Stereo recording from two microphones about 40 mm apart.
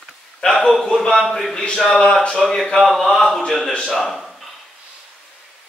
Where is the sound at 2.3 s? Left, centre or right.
Centre.